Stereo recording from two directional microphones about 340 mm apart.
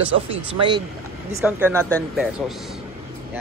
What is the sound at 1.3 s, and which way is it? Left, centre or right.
A man's voice, centre.